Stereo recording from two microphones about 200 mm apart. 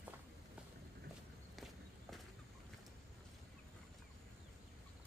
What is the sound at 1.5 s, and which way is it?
Walk, centre (ahead or behind).